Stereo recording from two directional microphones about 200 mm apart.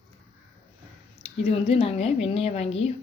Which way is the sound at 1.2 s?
30° left (ahead or behind).